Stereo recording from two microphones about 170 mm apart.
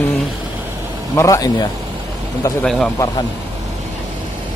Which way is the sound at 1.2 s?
20° left (ahead or behind).